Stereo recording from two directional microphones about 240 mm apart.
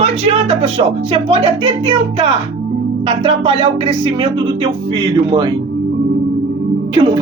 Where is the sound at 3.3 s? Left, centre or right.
Right.